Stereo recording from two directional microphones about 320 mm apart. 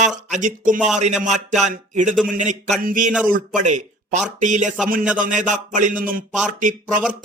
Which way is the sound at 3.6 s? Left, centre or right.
Right.